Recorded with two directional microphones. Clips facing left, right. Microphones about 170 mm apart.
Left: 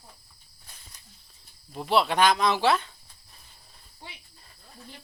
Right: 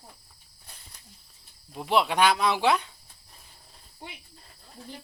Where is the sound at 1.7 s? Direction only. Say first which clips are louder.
Left 1 dB; 10° right (ahead or behind).